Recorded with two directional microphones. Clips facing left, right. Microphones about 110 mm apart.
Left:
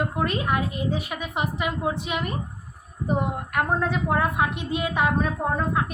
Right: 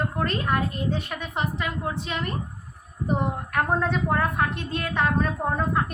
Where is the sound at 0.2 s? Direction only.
10° left (ahead or behind).